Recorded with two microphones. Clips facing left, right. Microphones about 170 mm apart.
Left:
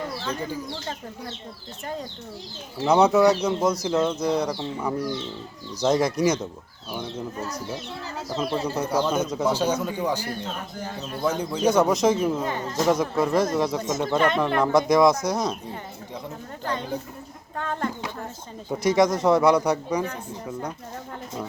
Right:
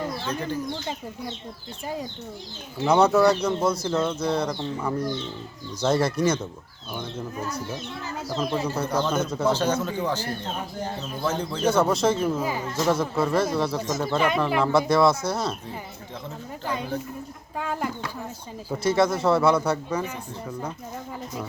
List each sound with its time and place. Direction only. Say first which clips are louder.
0.3 s a man's voice: right 1 dB; 10° left (ahead or behind)
2.7 s a man's voice: left 1 dB; 10° left (ahead or behind)
8.6 s a man's voice: left 1 dB; 10° left (ahead or behind)
12.4 s speech: even; 5° right (ahead or behind)
13.2 s a man's voice: left 1 dB; 15° left (ahead or behind)
14.2 s speech: left 1 dB; 5° right (ahead or behind)
14.8 s a man's voice: left 2 dB; 15° left (ahead or behind)
16.6 s speech: even; 10° right (ahead or behind)
18.7 s a man's voice: left 2 dB; 15° left (ahead or behind)